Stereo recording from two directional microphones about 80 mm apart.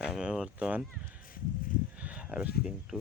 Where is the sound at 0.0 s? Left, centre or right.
Centre.